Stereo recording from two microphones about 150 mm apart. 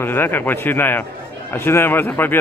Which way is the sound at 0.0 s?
15° left (ahead or behind).